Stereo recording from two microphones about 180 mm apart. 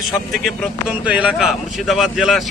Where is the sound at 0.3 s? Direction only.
5° right (ahead or behind).